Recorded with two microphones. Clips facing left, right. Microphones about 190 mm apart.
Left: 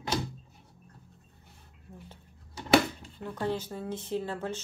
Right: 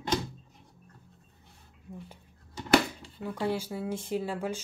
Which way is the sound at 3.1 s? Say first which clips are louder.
Right 2 dB; 10° right (ahead or behind).